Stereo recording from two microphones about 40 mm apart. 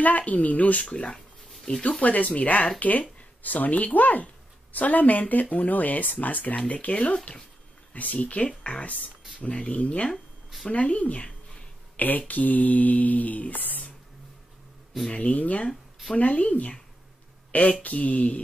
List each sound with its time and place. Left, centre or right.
0.0 s speech: left
0.9 s speech: left
2.0 s speech: left
4.7 s a sound: left
6.7 s speech: left
12.0 s a sound: left
15.0 s speech: left